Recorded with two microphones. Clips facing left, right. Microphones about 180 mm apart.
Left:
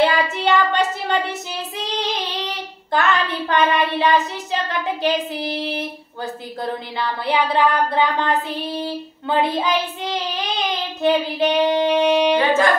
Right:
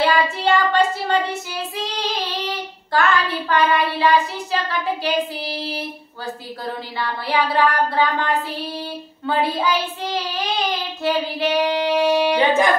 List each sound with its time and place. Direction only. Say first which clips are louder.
0.0 s child singing: left 1 dB; 20° left (ahead or behind)
7.0 s child singing: left 1 dB; 20° left (ahead or behind)
12.4 s speech: even; 20° right (ahead or behind)